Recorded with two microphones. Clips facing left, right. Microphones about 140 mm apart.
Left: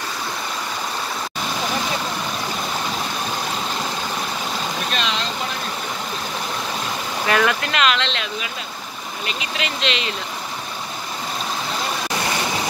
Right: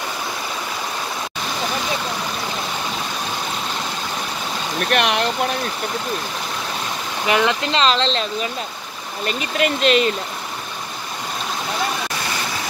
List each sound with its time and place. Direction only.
4.9 s speech: 60° right (ahead or behind)
7.2 s speech: 20° right (ahead or behind); by 10.1 s 45° right (ahead or behind)